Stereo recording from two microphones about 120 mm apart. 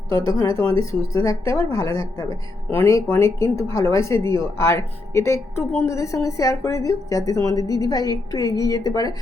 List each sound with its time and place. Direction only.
0.3 s a woman's voice: 30° left (ahead or behind)